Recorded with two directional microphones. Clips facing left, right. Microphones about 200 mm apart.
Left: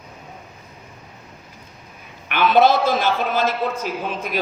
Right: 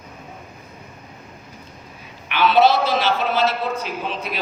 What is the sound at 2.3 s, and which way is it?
A man's voice, 50° left (ahead or behind).